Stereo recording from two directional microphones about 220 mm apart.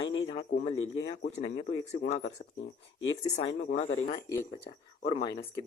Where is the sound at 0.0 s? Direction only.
60° left (ahead or behind).